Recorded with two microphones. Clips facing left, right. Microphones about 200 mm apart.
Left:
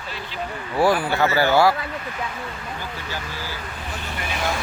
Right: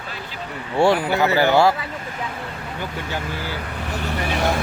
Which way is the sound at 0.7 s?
25° right (ahead or behind).